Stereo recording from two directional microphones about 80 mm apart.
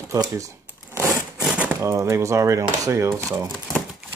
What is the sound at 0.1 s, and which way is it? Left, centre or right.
Speech, right.